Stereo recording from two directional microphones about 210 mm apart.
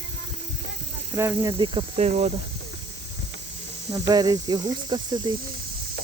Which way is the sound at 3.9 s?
20° right (ahead or behind).